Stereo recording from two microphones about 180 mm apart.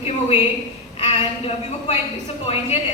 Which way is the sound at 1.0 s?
35° left (ahead or behind).